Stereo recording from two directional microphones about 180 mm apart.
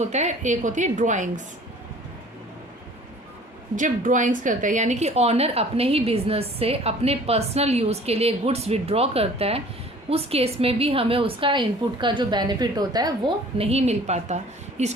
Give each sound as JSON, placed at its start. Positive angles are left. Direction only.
{"t": 0.0, "sound": "a woman's voice", "side_deg": -40}
{"t": 3.8, "sound": "a woman's voice", "side_deg": -45}